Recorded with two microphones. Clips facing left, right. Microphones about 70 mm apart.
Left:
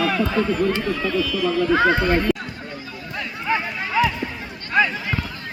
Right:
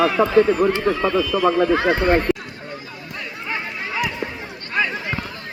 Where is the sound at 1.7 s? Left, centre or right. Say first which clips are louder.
Left 1 dB; centre.